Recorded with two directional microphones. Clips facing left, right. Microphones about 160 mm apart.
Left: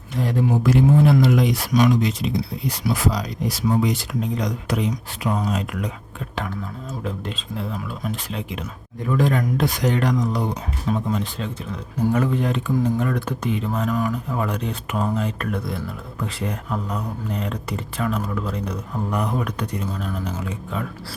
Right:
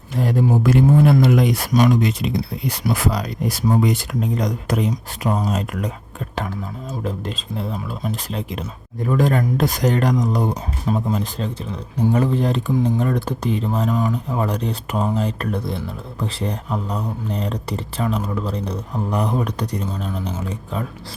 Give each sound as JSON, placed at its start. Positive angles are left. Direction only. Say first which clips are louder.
{"t": 0.2, "sound": "speech", "louder": "right 2 dB", "side_deg": -45}
{"t": 7.0, "sound": "speech", "louder": "right 3 dB", "side_deg": -40}